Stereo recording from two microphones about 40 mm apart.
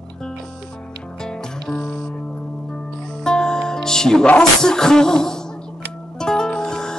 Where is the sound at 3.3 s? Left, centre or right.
Centre.